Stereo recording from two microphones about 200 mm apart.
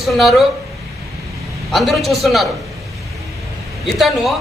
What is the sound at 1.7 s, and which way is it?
Speech, centre (ahead or behind).